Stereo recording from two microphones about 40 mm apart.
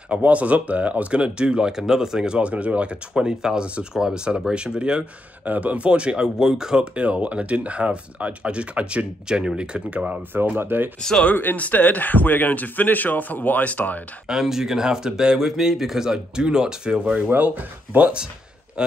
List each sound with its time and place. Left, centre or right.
0.3 s speech: right
2.4 s speech: right
5.4 s speech: right; by 6.9 s centre
7.0 s speech: right
10.6 s speech: right
11.0 s speech: centre
11.5 s speech: left
14.2 s speech: centre
17.2 s speech: right
18.8 s speech: right